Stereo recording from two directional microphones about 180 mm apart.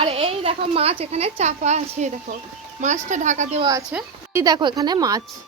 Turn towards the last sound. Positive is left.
turn(degrees=-20)  # may be behind; listen again after turning